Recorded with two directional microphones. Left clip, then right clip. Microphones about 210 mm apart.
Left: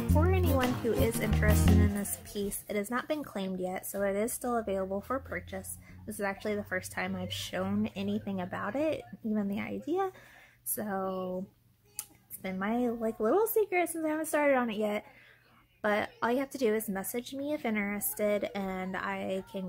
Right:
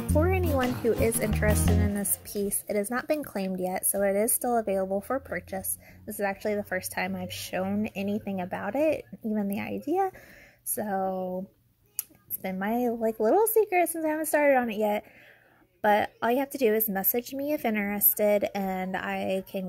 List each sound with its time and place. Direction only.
0.1 s music: 30° right (ahead or behind)
0.8 s speech: 25° right (ahead or behind)
1.5 s speech: centre (ahead or behind)
1.8 s a woman's voice: 25° right (ahead or behind)